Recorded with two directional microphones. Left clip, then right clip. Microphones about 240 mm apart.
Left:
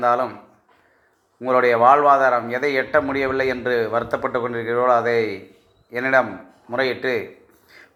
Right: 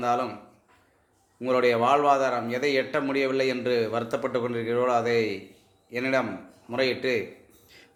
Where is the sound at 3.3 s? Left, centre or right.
Centre.